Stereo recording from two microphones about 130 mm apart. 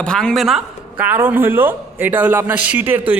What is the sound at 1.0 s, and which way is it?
Speech, 15° right (ahead or behind).